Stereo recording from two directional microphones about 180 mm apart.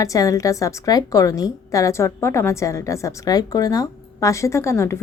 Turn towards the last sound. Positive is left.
turn(degrees=15)  # may be behind; listen again after turning